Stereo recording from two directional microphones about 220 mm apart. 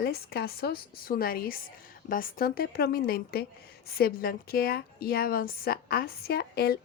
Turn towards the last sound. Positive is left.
turn(degrees=45)  # may be behind; listen again after turning